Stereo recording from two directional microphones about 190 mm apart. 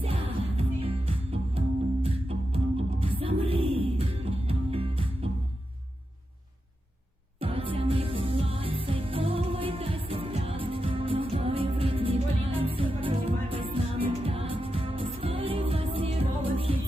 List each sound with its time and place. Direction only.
0.0 s music: 30° right (ahead or behind)
7.3 s music: 30° right (ahead or behind)